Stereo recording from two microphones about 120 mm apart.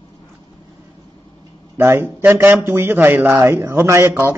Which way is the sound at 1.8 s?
20° right (ahead or behind).